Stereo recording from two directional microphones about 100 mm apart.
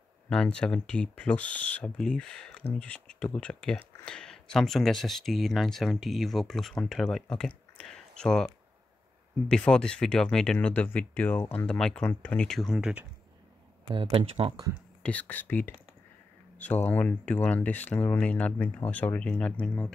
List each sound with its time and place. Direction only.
0.3 s speech: 10° left (ahead or behind)
9.5 s speech: 10° left (ahead or behind)
12.5 s speech: 5° right (ahead or behind)
13.8 s speech: 65° right (ahead or behind)
15.0 s speech: 15° left (ahead or behind)